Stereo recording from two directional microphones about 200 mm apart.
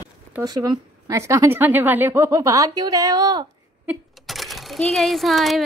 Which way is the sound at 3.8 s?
Centre (ahead or behind).